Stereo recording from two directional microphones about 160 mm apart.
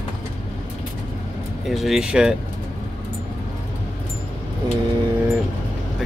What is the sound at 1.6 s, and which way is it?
Speech, centre (ahead or behind).